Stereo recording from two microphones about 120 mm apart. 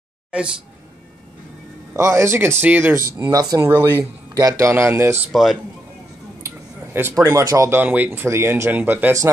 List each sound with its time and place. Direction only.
0.3 s speech: 10° right (ahead or behind)
2.0 s speech: 25° right (ahead or behind)
3.2 s speech: 30° right (ahead or behind)
5.3 s speech: centre (ahead or behind)
6.4 s a sound: 20° right (ahead or behind)
7.2 s speech: 25° right (ahead or behind)
7.8 s speech: 15° right (ahead or behind)